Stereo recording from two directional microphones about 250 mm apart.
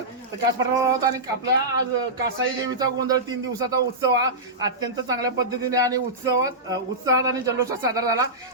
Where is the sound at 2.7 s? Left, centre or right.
Centre.